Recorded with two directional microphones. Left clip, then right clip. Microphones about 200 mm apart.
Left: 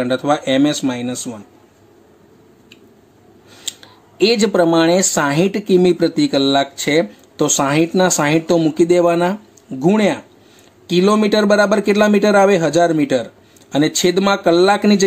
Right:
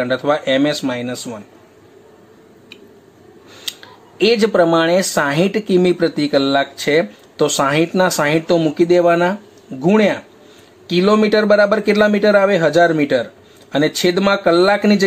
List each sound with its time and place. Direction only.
0.0 s speech: 25° left (ahead or behind)
3.6 s speech: 15° left (ahead or behind)